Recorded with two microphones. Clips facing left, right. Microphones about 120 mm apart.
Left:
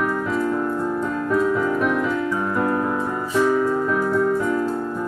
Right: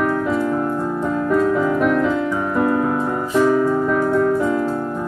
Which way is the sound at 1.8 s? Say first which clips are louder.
Right 4 dB; 10° left (ahead or behind).